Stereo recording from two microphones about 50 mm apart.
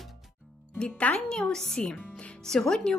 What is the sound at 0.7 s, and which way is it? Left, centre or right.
A woman's voice, left.